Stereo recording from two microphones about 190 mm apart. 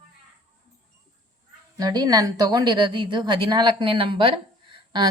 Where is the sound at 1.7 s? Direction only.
20° right (ahead or behind).